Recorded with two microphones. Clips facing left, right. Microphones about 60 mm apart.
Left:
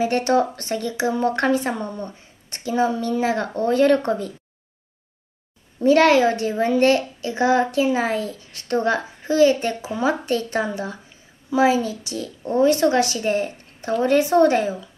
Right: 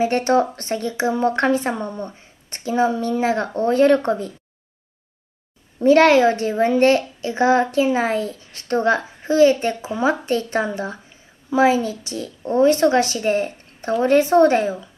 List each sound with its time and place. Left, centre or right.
0.0 s speech: right
5.8 s speech: right